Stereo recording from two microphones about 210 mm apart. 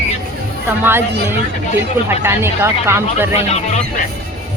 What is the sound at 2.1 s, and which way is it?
Speech, 10° right (ahead or behind).